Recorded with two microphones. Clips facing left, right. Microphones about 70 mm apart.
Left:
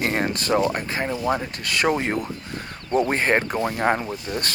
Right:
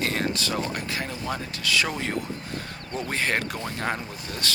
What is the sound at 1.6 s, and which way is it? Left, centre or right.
Speech, left.